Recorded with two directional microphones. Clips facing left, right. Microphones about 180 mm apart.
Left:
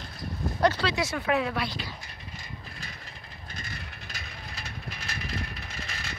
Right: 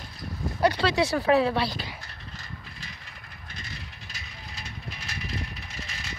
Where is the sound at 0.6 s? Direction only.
15° right (ahead or behind).